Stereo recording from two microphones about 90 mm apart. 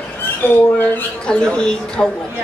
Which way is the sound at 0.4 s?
20° left (ahead or behind).